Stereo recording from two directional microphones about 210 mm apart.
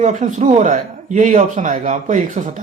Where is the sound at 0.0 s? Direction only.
35° right (ahead or behind).